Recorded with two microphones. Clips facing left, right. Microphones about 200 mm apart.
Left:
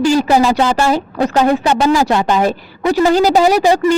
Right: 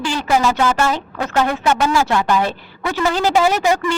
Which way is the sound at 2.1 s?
20° left (ahead or behind).